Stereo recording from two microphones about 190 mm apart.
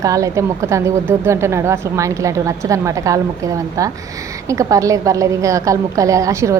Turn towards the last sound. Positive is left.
turn(degrees=-15)  # may be behind; listen again after turning